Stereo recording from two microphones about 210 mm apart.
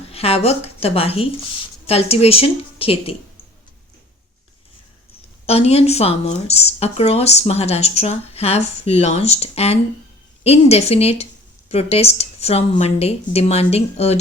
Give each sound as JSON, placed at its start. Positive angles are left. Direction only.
{"t": 0.1, "sound": "a woman's voice", "side_deg": 30}
{"t": 5.5, "sound": "speech", "side_deg": 30}